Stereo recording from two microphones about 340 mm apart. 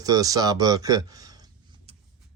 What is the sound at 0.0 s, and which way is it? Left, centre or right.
Speech, centre.